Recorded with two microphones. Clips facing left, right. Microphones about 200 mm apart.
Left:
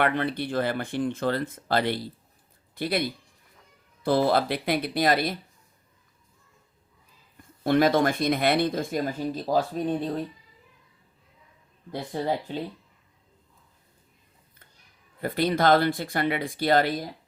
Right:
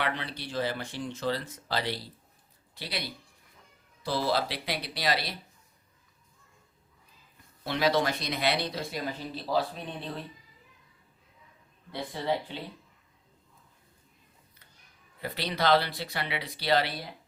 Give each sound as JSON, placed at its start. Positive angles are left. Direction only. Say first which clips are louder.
{"t": 0.0, "sound": "speech", "louder": "left 8 dB", "side_deg": 55}
{"t": 7.6, "sound": "speech", "louder": "left 6 dB", "side_deg": 50}
{"t": 11.9, "sound": "speech", "louder": "left 3 dB", "side_deg": 45}
{"t": 15.2, "sound": "speech", "louder": "left 7 dB", "side_deg": 50}